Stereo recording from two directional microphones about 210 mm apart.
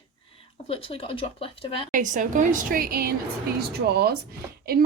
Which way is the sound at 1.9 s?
35° right (ahead or behind).